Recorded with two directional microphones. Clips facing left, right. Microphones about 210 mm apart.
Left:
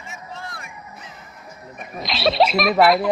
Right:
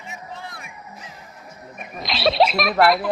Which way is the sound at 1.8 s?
Centre (ahead or behind).